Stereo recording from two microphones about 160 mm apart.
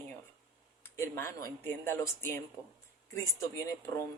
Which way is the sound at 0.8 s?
15° left (ahead or behind).